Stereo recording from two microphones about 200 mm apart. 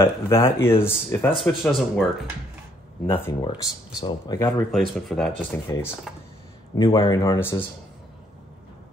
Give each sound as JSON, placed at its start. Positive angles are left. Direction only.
{"t": 0.0, "sound": "speech", "side_deg": 10}
{"t": 3.1, "sound": "speech", "side_deg": 10}
{"t": 3.4, "sound": "speech", "side_deg": 25}
{"t": 4.6, "sound": "speech", "side_deg": 0}
{"t": 5.7, "sound": "speech", "side_deg": 10}